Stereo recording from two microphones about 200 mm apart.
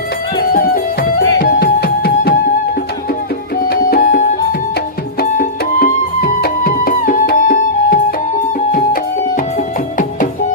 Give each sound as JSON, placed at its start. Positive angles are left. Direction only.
{"t": 0.5, "sound": "music", "side_deg": 45}
{"t": 3.6, "sound": "music", "side_deg": 45}